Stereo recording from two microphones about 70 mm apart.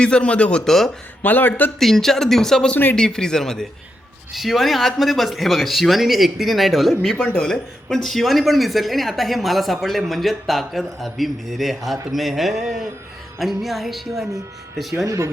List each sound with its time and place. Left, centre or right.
0.0 s speech: centre
0.9 s speech: left
1.8 s speech: centre
15.0 s speech: right